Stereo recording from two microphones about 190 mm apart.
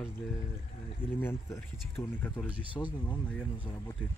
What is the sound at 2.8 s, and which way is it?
Speech, 20° left (ahead or behind).